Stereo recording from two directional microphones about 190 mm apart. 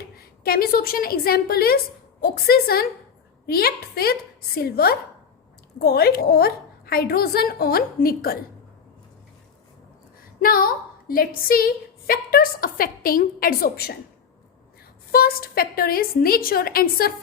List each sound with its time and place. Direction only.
0.4 s a woman's voice: 50° left (ahead or behind)
10.4 s a woman's voice: 50° left (ahead or behind)
15.1 s a woman's voice: 50° left (ahead or behind)